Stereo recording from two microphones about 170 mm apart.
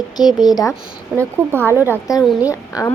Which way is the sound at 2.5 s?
20° left (ahead or behind).